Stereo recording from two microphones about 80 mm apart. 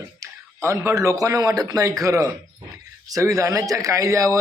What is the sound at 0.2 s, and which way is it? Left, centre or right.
A man's voice, right.